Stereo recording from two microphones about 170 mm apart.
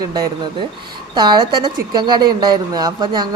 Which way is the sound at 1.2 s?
25° right (ahead or behind).